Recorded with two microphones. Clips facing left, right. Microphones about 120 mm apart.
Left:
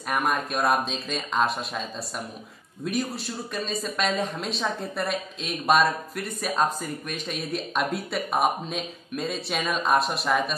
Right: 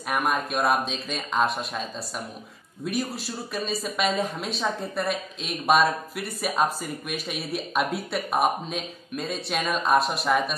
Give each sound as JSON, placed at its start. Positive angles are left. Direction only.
{"t": 0.1, "sound": "speech", "side_deg": 0}